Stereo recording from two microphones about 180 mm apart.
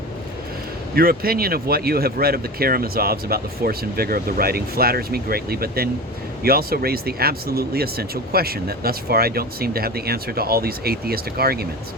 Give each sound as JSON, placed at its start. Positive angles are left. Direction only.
{"t": 0.9, "sound": "speech", "side_deg": -55}